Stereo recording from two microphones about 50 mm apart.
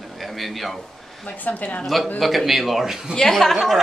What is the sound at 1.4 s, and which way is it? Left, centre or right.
Speech, left.